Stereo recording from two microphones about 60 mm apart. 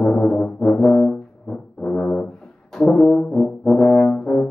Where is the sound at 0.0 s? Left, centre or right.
Centre.